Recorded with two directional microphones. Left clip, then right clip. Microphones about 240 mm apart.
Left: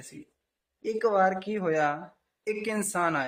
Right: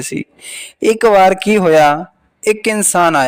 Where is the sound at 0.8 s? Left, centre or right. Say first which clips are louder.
Right 16 dB; right.